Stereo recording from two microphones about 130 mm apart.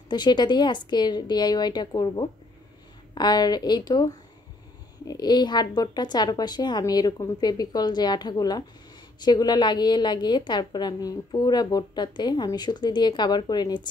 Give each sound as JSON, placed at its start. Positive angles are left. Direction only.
{"t": 0.1, "sound": "a woman's voice", "side_deg": 35}